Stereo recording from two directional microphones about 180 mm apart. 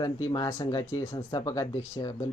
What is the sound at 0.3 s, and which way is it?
Speech, 25° left (ahead or behind).